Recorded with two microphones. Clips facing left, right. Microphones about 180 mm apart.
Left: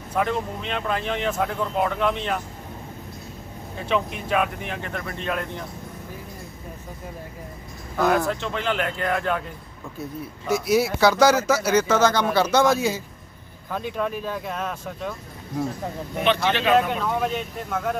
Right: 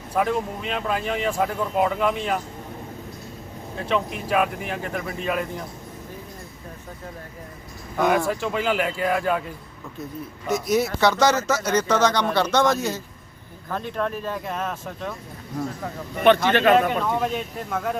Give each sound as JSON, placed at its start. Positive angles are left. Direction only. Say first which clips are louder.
{"t": 0.2, "sound": "speech", "louder": "right 1 dB", "side_deg": -5}
{"t": 3.8, "sound": "speech", "louder": "even", "side_deg": 0}
{"t": 7.9, "sound": "speech", "louder": "even", "side_deg": 0}
{"t": 10.5, "sound": "speech", "louder": "left 1 dB", "side_deg": 10}
{"t": 16.2, "sound": "speech", "louder": "right 5 dB", "side_deg": -50}
{"t": 16.9, "sound": "speech", "louder": "right 1 dB", "side_deg": 0}